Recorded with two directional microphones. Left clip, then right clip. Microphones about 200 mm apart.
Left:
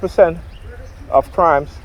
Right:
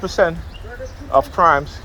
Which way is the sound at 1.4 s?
40° left (ahead or behind).